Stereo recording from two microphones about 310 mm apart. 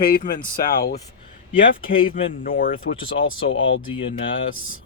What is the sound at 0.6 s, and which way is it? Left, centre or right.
Speech, left.